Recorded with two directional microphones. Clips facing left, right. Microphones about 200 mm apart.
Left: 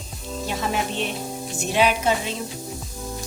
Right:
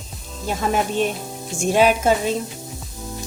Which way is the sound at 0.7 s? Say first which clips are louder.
Right 8 dB; 45° right (ahead or behind).